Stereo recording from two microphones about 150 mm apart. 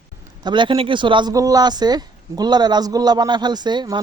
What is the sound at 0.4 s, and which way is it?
Speech, 30° right (ahead or behind).